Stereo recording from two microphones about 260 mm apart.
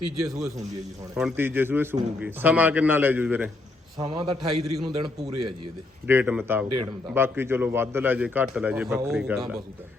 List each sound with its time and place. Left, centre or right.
1.1 s a man's voice: centre; by 4.8 s right
5.3 s speech: right
6.1 s a man's voice: centre